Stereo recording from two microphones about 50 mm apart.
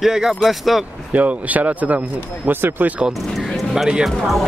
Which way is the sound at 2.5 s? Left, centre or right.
Right.